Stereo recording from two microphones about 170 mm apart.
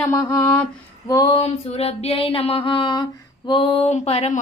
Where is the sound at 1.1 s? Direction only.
25° left (ahead or behind).